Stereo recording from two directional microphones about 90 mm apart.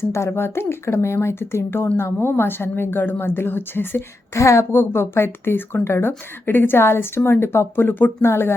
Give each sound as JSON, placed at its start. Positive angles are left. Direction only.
{"t": 0.0, "sound": "a woman's voice", "side_deg": 30}